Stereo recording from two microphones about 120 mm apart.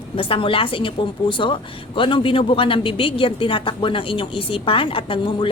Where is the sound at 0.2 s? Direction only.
45° left (ahead or behind).